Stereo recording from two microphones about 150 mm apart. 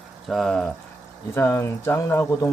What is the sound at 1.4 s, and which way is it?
Speech, 20° left (ahead or behind).